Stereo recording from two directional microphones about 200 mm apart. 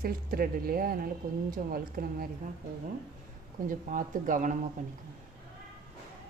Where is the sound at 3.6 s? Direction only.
40° right (ahead or behind).